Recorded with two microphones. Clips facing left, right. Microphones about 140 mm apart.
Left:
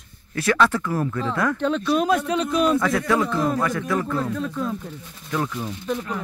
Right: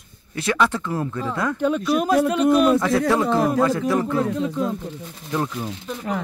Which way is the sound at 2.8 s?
30° right (ahead or behind).